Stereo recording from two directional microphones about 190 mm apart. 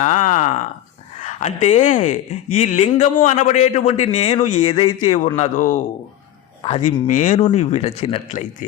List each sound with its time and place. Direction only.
0.0 s a sound: 40° left (ahead or behind)
1.2 s speech: 35° left (ahead or behind)
6.6 s speech: 30° left (ahead or behind)